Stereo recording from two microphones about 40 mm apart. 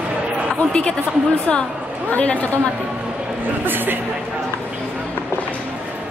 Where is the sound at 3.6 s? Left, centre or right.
Right.